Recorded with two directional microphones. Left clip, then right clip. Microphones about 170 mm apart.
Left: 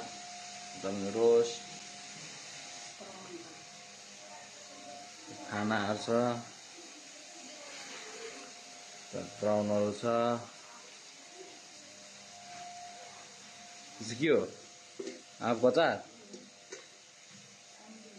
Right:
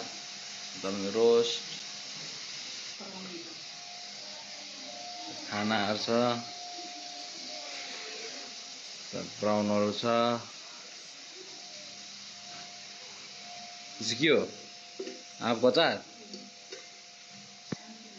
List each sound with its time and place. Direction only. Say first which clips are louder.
0.8 s speech: right 3 dB; centre (ahead or behind)
5.5 s speech: right 3 dB; 15° left (ahead or behind)
9.4 s speech: right 2 dB; 5° right (ahead or behind)
14.0 s speech: right 3 dB; 10° left (ahead or behind)
15.4 s speech: right 2 dB; 10° left (ahead or behind)